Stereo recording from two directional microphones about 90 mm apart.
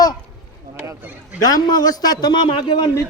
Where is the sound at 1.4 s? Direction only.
45° left (ahead or behind).